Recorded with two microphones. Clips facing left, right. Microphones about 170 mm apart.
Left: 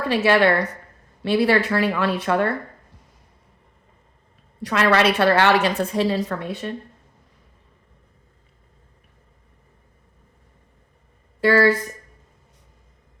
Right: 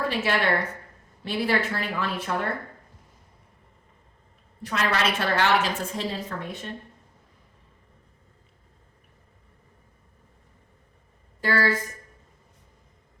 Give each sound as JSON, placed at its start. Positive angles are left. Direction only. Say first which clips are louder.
{"t": 0.1, "sound": "a woman's voice", "louder": "left 7 dB", "side_deg": 70}
{"t": 4.6, "sound": "a woman's voice", "louder": "left 8 dB", "side_deg": 70}
{"t": 11.3, "sound": "speech", "louder": "left 8 dB", "side_deg": 70}